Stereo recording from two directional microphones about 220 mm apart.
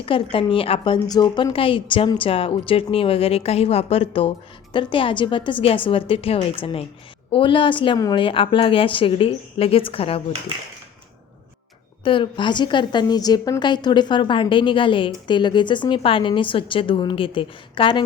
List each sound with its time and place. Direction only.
0.0 s a woman's voice: 25° left (ahead or behind)
12.0 s a woman's voice: 25° left (ahead or behind)